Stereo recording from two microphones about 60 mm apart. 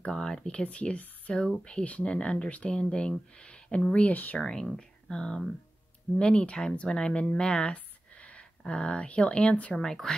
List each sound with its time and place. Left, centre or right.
0.0 s speech: centre
4.4 s speech: centre
9.8 s speech: centre